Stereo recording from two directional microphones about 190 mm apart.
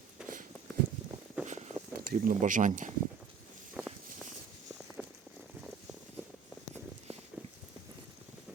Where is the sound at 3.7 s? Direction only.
5° right (ahead or behind).